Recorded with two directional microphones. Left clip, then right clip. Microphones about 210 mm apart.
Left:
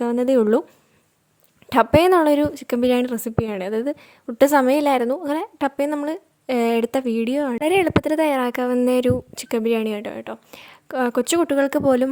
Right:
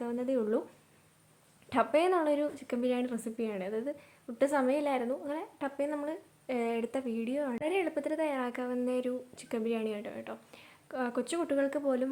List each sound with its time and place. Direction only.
0.0 s a woman's voice: 50° left (ahead or behind)
1.7 s a woman's voice: 50° left (ahead or behind)